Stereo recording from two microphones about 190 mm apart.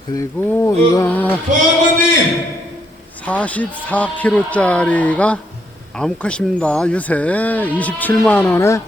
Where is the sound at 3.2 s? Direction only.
5° left (ahead or behind).